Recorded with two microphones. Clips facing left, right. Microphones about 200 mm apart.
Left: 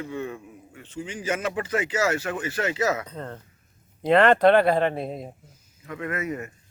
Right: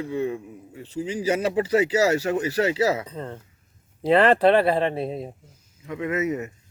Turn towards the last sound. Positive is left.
turn(degrees=-20)  # may be behind; listen again after turning